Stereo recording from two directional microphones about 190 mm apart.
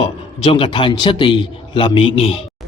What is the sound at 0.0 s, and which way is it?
A man's voice, 25° left (ahead or behind).